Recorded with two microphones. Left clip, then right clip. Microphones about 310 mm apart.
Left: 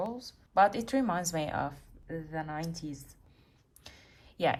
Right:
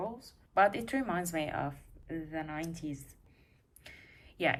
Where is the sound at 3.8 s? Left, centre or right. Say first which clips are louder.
Right 1 dB; centre.